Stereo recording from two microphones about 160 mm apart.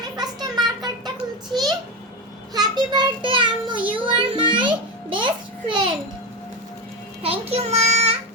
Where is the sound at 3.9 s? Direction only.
30° right (ahead or behind).